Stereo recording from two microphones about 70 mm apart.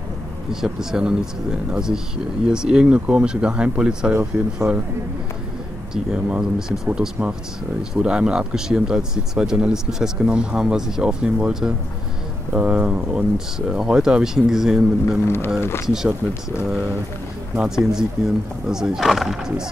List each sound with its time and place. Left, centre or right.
0.5 s speech: centre
6.1 s speech: centre
7.9 s speech: centre
15.2 s speech: left
15.9 s speech: centre
17.6 s speech: centre